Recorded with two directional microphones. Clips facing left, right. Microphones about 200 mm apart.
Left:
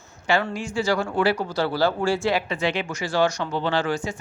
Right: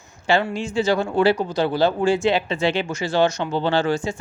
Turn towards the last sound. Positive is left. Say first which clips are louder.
# right 4 dB
turn(degrees=-25)  # may be behind; listen again after turning